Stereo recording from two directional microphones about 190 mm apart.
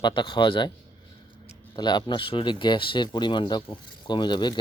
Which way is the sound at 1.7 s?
20° left (ahead or behind).